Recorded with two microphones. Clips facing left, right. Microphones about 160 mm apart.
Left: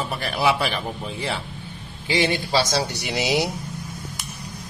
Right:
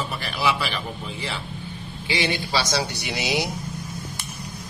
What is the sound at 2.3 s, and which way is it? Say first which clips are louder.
Speech: left 3 dB; 40° left (ahead or behind).